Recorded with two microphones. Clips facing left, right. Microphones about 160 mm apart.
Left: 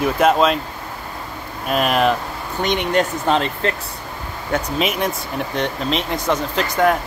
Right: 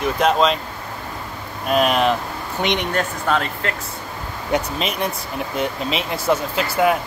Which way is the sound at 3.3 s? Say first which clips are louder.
Left 3 dB; 30° left (ahead or behind).